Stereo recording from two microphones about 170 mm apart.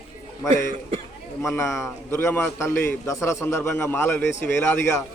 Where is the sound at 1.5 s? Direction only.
15° left (ahead or behind).